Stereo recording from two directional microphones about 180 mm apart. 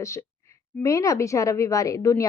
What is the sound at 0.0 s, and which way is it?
Speech, 15° left (ahead or behind).